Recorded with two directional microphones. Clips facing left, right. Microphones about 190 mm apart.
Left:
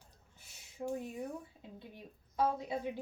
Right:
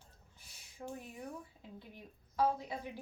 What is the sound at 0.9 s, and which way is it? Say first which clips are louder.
A woman's voice: left 6 dB; 15° left (ahead or behind).